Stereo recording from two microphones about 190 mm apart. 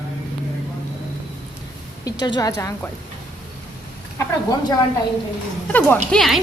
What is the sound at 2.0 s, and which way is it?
Speech, 20° left (ahead or behind).